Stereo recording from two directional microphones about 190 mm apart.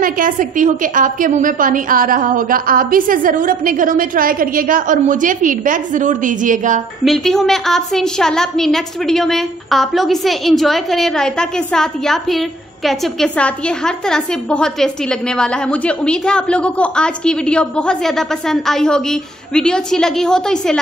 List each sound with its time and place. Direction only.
0.0 s a woman's voice: 45° right (ahead or behind)
7.1 s a woman's voice: centre (ahead or behind)